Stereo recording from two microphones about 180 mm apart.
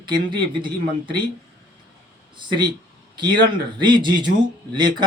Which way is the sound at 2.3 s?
25° right (ahead or behind).